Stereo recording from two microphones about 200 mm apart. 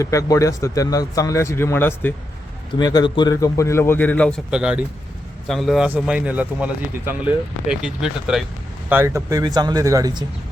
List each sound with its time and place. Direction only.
0.0 s speech: 15° left (ahead or behind)
2.7 s speech: 20° left (ahead or behind)
4.5 s speech: 5° right (ahead or behind)
8.9 s speech: 10° right (ahead or behind)